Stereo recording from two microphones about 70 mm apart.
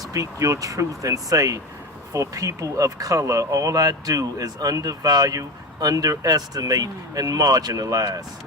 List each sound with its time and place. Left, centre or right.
0.1 s speech: right